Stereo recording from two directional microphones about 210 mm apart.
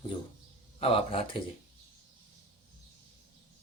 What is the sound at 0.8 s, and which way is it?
Speech, 25° left (ahead or behind).